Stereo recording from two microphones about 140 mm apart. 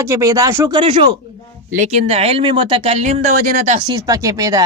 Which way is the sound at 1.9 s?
50° right (ahead or behind).